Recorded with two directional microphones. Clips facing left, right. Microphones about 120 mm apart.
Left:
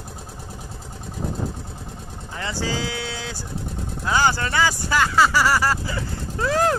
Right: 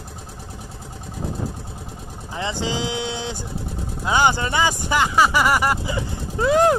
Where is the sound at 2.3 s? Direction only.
20° right (ahead or behind).